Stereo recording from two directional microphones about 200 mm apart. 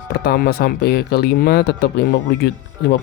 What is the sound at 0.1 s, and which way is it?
Speech, 50° left (ahead or behind).